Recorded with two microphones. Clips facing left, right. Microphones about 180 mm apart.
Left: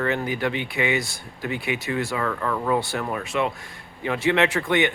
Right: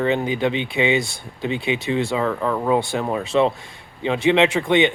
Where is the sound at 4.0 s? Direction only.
20° right (ahead or behind).